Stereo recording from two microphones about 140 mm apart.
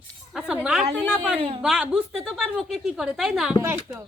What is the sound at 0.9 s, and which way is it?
Speech, 10° left (ahead or behind).